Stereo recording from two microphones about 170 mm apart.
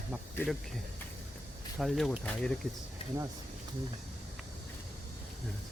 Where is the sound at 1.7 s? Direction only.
Centre (ahead or behind).